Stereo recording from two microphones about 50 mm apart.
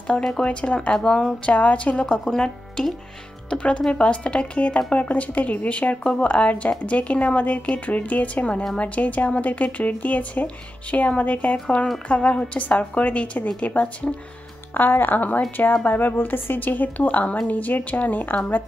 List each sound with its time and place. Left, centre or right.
0.2 s speech: centre
1.5 s speech: left
2.2 s speech: centre
3.4 s speech: left
14.7 s speech: left